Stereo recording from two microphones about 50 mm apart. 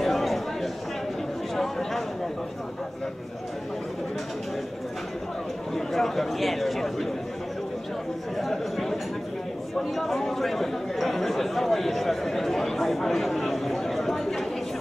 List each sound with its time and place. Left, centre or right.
0.0 s a sound: centre
5.8 s speech: centre
8.4 s speech: centre